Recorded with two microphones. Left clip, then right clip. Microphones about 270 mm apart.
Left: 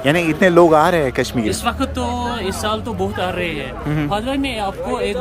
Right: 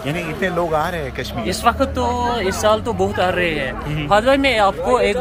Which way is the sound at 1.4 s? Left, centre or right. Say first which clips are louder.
Right 3 dB; centre.